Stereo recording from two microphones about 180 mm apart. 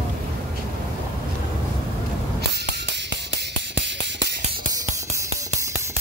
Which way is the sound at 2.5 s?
70° right (ahead or behind).